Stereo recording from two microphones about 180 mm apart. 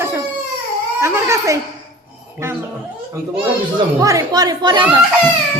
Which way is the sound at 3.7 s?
20° right (ahead or behind).